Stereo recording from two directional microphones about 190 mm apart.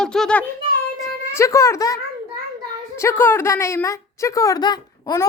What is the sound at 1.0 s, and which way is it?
Speech, 15° left (ahead or behind).